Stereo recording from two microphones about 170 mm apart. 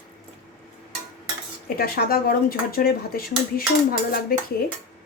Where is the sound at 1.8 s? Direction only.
60° left (ahead or behind).